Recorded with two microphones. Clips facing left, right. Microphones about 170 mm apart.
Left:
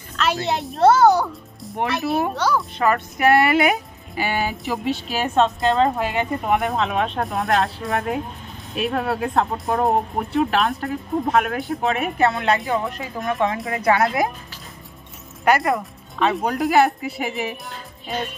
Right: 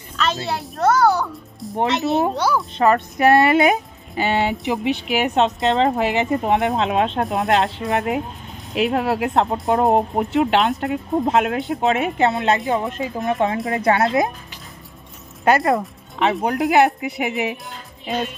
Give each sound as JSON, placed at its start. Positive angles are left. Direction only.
{"t": 0.4, "sound": "a child's voice", "side_deg": 20}
{"t": 1.8, "sound": "speech", "side_deg": -20}
{"t": 2.3, "sound": "speech", "side_deg": -10}
{"t": 2.8, "sound": "speech", "side_deg": -25}